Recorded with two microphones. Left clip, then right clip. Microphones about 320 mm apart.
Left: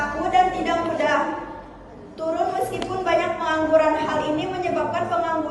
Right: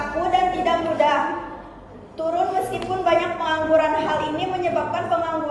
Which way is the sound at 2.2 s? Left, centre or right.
Centre.